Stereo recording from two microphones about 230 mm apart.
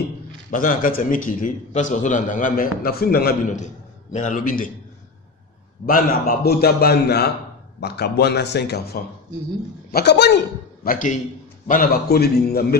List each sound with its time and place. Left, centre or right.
0.5 s a man's voice: left
5.9 s a man's voice: left